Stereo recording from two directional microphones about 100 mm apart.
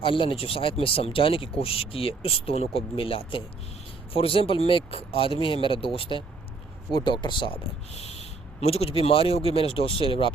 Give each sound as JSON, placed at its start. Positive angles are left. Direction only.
{"t": 0.0, "sound": "speech", "side_deg": 60}
{"t": 6.9, "sound": "speech", "side_deg": 50}
{"t": 7.9, "sound": "speech", "side_deg": 90}